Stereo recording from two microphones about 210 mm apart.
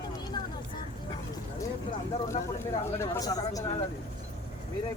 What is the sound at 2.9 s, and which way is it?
Speech, 10° left (ahead or behind).